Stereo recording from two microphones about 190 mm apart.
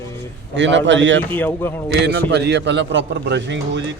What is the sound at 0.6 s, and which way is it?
Speech, 75° right (ahead or behind).